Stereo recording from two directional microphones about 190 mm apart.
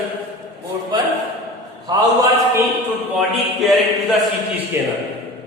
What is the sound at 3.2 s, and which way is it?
Speech, centre (ahead or behind).